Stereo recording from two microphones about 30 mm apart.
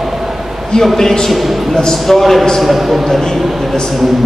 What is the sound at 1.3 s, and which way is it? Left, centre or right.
Music, centre.